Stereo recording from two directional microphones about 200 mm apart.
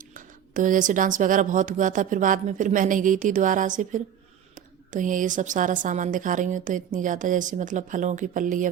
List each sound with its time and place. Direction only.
0.5 s a woman's voice: 40° right (ahead or behind)